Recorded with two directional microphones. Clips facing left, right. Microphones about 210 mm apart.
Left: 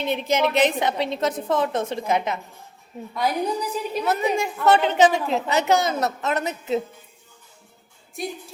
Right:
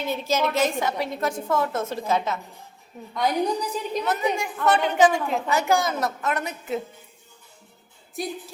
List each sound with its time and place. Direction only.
0.0 s a woman's voice: 20° left (ahead or behind)
3.2 s a woman's voice: centre (ahead or behind)
4.0 s a woman's voice: 25° left (ahead or behind)
8.1 s a woman's voice: centre (ahead or behind)